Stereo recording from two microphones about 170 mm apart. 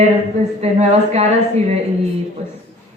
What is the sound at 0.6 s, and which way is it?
A man's voice, 40° right (ahead or behind).